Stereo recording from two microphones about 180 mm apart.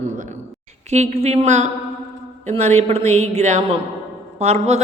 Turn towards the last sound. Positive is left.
turn(degrees=-40)  # may be behind; listen again after turning